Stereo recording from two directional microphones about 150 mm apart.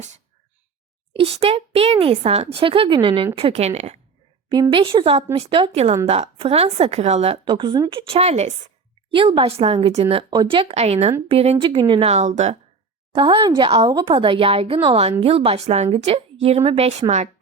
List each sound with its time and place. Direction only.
1.1 s a woman's voice: 40° right (ahead or behind)
4.7 s a woman's voice: 35° right (ahead or behind); by 8.7 s 50° right (ahead or behind)
9.0 s a woman's voice: 35° right (ahead or behind)
13.1 s a woman's voice: 35° right (ahead or behind)